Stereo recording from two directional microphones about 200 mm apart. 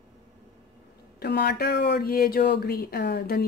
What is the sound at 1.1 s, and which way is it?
Speech, 55° left (ahead or behind).